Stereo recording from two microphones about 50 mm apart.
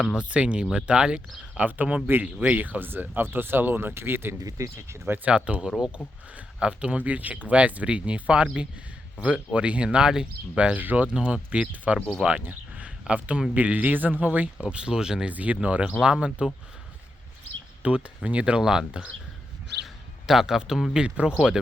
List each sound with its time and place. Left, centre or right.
0.2 s speech: right
1.6 s speech: right
2.6 s speech: right
4.5 s speech: right
5.2 s speech: right
10.8 s a man's voice: right
11.1 s speech: right
12.5 s a sound: right
13.5 s a man's voice: right; by 15.3 s centre
15.3 s speech: right
17.8 s speech: right
18.9 s speech: right
19.8 s a sound: centre
20.9 s speech: centre